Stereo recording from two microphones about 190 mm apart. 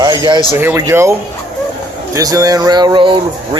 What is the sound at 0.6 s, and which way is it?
Speech, 15° right (ahead or behind).